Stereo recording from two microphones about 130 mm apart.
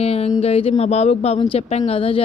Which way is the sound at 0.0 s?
50° left (ahead or behind).